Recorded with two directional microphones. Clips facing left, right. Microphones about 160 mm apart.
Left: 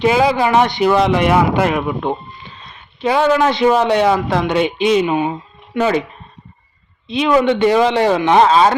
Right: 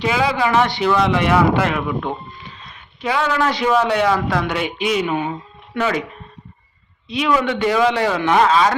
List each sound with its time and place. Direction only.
0.2 s speech: 30° left (ahead or behind)
7.1 s speech: 25° left (ahead or behind)